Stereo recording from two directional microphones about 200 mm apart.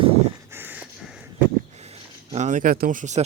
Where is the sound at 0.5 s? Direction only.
10° right (ahead or behind).